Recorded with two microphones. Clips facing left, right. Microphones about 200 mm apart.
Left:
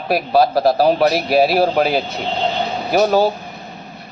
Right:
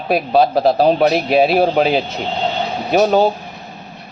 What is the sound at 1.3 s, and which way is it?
Speech, 5° left (ahead or behind).